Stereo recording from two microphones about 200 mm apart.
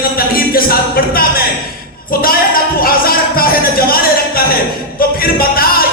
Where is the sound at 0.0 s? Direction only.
45° left (ahead or behind).